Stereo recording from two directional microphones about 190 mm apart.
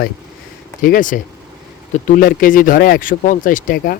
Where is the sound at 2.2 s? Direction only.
45° left (ahead or behind).